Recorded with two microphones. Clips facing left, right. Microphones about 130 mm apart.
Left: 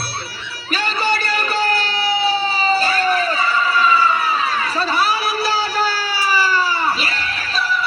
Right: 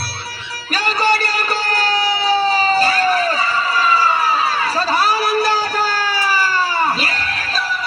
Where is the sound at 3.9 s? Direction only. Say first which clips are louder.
Right 1 dB; 35° right (ahead or behind).